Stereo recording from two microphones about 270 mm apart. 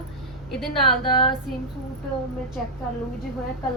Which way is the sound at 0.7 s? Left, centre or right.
Centre.